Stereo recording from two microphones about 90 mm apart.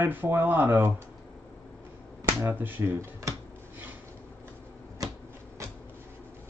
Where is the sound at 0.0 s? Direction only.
20° right (ahead or behind).